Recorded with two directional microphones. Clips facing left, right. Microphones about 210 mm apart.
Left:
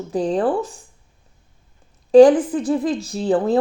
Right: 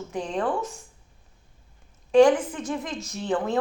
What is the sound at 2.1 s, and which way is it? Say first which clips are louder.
A woman's voice: left 7 dB; 35° left (ahead or behind).